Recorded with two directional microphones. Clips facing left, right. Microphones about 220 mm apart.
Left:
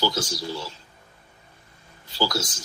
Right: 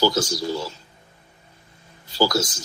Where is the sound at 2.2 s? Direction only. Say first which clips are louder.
Right 5 dB; 45° right (ahead or behind).